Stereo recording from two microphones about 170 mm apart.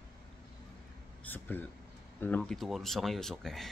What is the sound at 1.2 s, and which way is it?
Speech, 10° left (ahead or behind).